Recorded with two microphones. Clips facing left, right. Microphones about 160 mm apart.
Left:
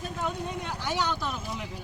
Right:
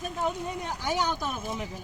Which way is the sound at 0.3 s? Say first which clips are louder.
Even; 10° right (ahead or behind).